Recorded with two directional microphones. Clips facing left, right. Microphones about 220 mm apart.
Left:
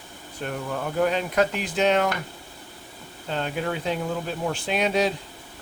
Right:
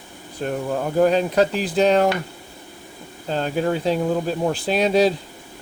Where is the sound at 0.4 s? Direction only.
35° right (ahead or behind).